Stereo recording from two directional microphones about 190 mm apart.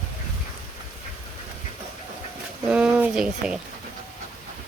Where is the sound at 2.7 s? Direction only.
5° right (ahead or behind).